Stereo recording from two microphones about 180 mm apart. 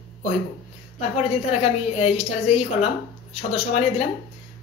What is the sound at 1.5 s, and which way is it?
A woman's voice, 35° left (ahead or behind).